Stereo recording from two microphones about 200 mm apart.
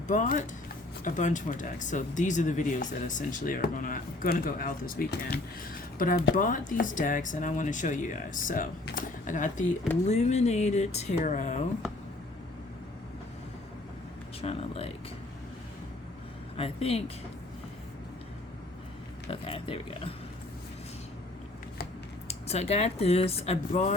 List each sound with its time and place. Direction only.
0.1 s speech: 40° left (ahead or behind)
14.4 s speech: 30° left (ahead or behind)
16.6 s speech: 30° left (ahead or behind)
19.3 s speech: 25° left (ahead or behind)
22.3 s speech: 30° left (ahead or behind)